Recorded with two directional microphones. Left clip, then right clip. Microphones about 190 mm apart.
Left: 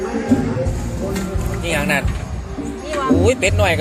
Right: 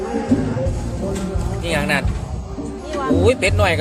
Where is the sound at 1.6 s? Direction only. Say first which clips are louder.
Left 1 dB; centre (ahead or behind).